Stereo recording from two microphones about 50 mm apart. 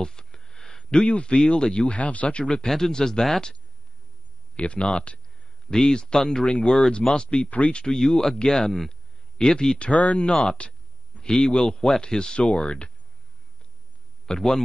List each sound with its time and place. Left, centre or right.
0.0 s a sound: centre
1.0 s speech: centre
4.6 s speech: left
7.4 s speech: left
9.8 s speech: left
14.2 s a man's voice: centre